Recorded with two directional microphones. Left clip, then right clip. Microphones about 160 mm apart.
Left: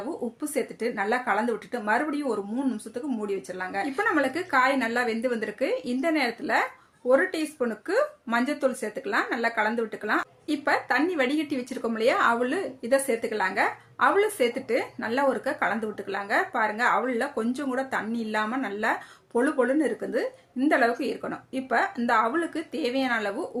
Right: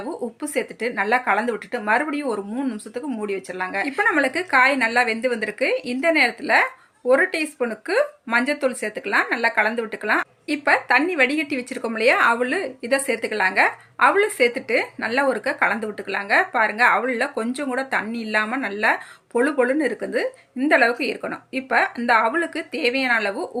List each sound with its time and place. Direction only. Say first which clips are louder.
0.5 s speech: right 5 dB; 25° right (ahead or behind)